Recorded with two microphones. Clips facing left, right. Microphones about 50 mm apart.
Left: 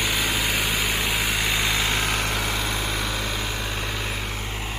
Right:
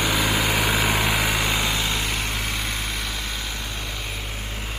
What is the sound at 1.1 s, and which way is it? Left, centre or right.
Vehicle, centre.